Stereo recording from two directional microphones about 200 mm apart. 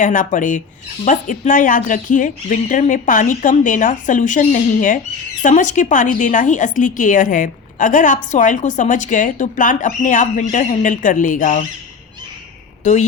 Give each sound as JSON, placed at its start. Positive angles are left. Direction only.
{"t": 0.0, "sound": "a woman's voice", "side_deg": 40}
{"t": 12.8, "sound": "a woman's voice", "side_deg": 35}